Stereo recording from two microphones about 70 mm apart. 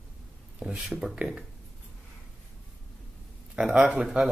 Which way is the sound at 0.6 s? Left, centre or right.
Centre.